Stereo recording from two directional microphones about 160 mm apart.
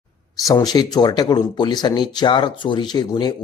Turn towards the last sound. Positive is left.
turn(degrees=30)  # may be behind; listen again after turning